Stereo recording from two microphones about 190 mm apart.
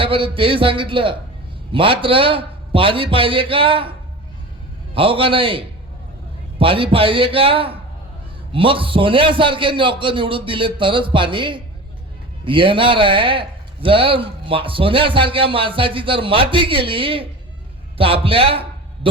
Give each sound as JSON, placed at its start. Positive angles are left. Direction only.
{"t": 0.0, "sound": "a man's voice", "side_deg": -25}
{"t": 4.9, "sound": "a man's voice", "side_deg": -30}